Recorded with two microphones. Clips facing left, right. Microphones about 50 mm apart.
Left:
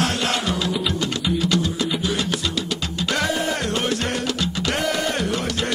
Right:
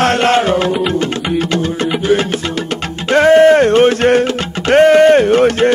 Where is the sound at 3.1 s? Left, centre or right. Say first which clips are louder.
Right 17 dB; right.